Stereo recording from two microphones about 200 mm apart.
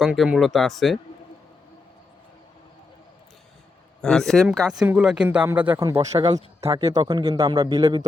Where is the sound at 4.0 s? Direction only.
Centre (ahead or behind).